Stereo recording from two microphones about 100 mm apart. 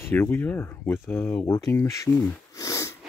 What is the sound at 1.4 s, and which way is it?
Speech, 35° left (ahead or behind).